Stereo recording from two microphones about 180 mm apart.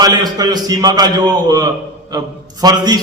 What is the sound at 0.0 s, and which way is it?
A man's voice, 20° right (ahead or behind).